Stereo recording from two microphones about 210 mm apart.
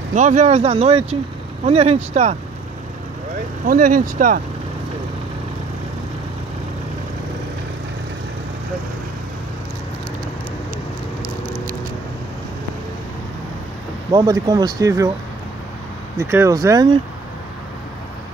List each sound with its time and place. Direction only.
0.1 s speech: 35° right (ahead or behind)
3.6 s speech: 40° right (ahead or behind)
14.1 s speech: 20° right (ahead or behind)
16.2 s speech: 15° right (ahead or behind)